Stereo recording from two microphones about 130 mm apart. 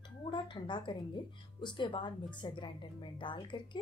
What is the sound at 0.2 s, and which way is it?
Speech, 40° left (ahead or behind).